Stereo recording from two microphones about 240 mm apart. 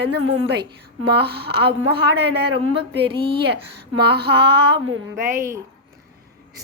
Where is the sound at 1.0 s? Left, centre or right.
Right.